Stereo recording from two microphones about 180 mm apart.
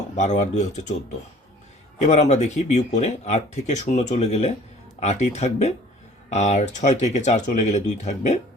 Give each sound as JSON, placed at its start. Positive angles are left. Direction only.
{"t": 0.2, "sound": "speech", "side_deg": 40}
{"t": 2.0, "sound": "speech", "side_deg": 40}